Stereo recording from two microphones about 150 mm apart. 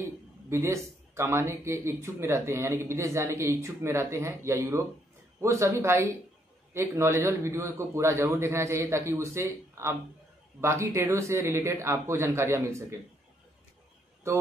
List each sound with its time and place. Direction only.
0.0 s a man's voice: 15° right (ahead or behind)